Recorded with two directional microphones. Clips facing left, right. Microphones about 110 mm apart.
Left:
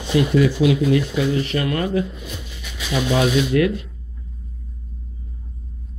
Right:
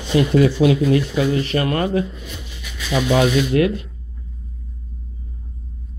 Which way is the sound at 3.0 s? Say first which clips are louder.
Right 3 dB; 20° right (ahead or behind).